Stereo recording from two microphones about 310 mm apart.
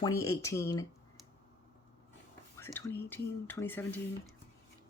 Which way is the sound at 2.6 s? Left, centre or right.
Centre.